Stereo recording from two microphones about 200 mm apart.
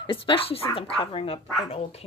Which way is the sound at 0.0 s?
25° left (ahead or behind).